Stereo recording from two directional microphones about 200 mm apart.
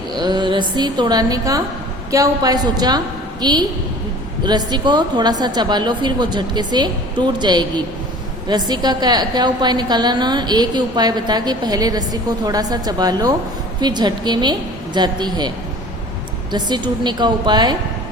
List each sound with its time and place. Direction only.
0.1 s a woman's voice: 20° right (ahead or behind)